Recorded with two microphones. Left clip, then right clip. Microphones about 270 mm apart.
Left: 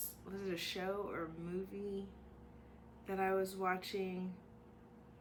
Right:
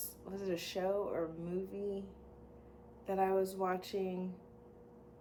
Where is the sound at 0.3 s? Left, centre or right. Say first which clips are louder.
Right 2 dB; centre.